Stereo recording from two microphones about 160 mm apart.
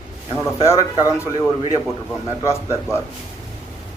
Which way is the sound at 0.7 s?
20° left (ahead or behind).